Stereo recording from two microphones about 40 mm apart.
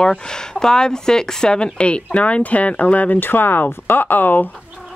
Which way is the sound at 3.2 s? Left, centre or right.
Left.